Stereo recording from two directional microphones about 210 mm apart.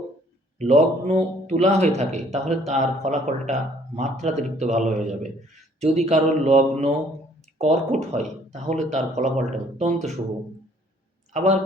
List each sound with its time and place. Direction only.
0.6 s speech: 35° right (ahead or behind)
11.3 s a man's voice: 35° right (ahead or behind)